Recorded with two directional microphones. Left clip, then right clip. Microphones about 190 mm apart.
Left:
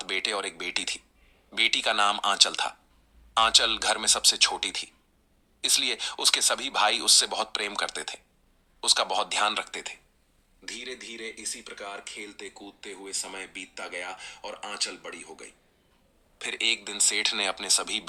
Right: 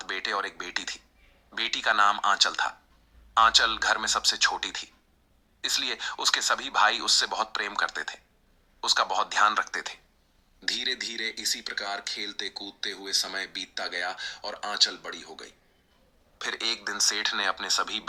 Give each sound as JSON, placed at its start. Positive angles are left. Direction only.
{"t": 0.0, "sound": "speech", "side_deg": 30}
{"t": 10.7, "sound": "speech", "side_deg": -35}
{"t": 11.9, "sound": "speech", "side_deg": -5}
{"t": 17.2, "sound": "speech", "side_deg": 30}